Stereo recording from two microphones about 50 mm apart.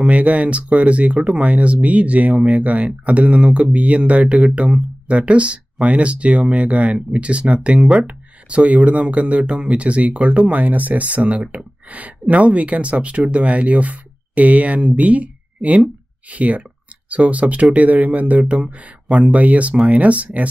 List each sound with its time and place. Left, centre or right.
0.0 s speech: right
8.5 s speech: right